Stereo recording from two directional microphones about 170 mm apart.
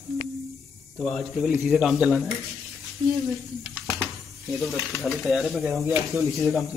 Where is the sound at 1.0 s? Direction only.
Centre (ahead or behind).